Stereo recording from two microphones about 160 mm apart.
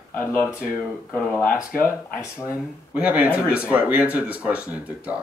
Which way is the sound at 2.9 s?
10° right (ahead or behind).